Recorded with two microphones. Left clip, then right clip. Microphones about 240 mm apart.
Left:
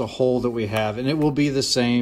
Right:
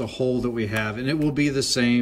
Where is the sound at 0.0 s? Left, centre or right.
Centre.